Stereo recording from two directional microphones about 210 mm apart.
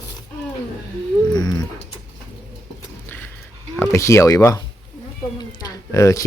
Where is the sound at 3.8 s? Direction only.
15° left (ahead or behind).